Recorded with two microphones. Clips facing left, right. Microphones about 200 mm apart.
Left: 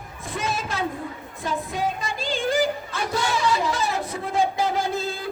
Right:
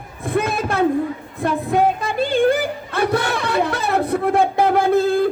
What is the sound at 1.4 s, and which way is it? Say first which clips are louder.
Yodeling: right 9 dB; 60° right (ahead or behind).